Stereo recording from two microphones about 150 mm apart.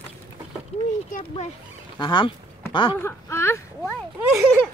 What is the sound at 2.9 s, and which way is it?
Speech, 15° left (ahead or behind).